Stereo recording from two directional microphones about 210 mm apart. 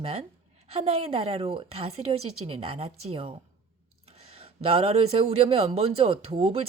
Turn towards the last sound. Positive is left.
turn(degrees=-25)  # may be behind; listen again after turning